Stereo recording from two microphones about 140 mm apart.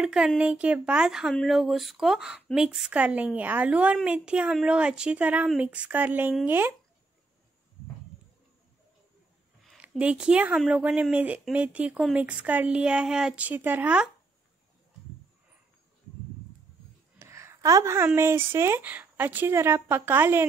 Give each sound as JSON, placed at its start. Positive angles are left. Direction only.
{"t": 0.0, "sound": "a woman's voice", "side_deg": -5}
{"t": 9.8, "sound": "speech", "side_deg": -10}
{"t": 17.2, "sound": "a woman's voice", "side_deg": -20}